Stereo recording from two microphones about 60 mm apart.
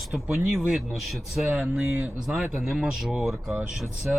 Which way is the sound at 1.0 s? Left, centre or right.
Centre.